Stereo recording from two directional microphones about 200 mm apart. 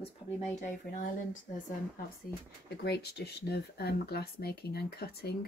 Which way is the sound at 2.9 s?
55° left (ahead or behind).